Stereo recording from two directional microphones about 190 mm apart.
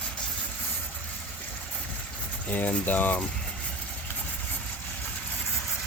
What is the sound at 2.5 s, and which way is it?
Speech, 10° left (ahead or behind).